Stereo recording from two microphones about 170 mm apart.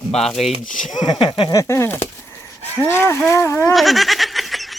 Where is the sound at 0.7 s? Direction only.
50° left (ahead or behind).